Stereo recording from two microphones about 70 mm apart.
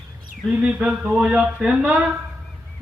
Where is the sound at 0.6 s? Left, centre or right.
Centre.